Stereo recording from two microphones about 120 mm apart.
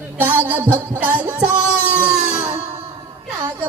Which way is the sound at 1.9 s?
10° right (ahead or behind).